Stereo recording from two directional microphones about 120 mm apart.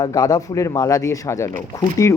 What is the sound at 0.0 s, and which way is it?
A man's voice, 30° left (ahead or behind).